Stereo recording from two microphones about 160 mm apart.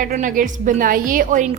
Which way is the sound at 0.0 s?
55° right (ahead or behind).